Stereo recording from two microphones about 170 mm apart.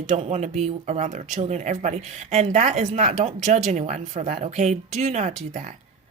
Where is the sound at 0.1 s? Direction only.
40° right (ahead or behind).